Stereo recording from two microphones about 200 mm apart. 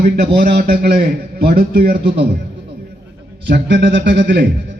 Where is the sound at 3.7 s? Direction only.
65° right (ahead or behind).